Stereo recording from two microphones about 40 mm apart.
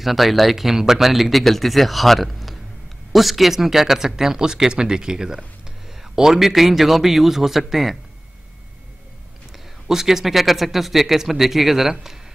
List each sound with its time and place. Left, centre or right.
0.0 s speech: centre
9.5 s speech: centre